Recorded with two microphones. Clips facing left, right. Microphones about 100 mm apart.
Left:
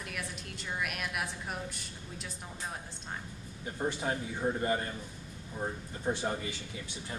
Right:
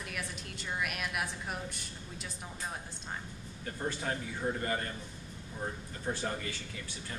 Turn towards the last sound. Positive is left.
turn(degrees=15)  # may be behind; listen again after turning